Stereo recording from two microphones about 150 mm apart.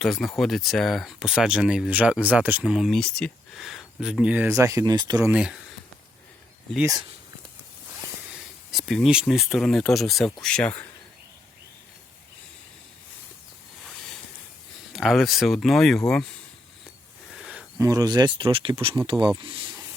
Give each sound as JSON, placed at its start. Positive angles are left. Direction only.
{"t": 0.0, "sound": "speech", "side_deg": 0}
{"t": 5.3, "sound": "speech", "side_deg": -5}
{"t": 8.3, "sound": "speech", "side_deg": 0}
{"t": 14.9, "sound": "speech", "side_deg": 0}
{"t": 17.3, "sound": "a sound", "side_deg": 0}
{"t": 17.7, "sound": "speech", "side_deg": -20}